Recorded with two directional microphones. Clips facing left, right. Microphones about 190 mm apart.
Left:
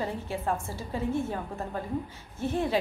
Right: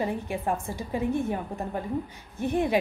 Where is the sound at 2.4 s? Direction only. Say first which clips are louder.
Right 3 dB; 15° right (ahead or behind).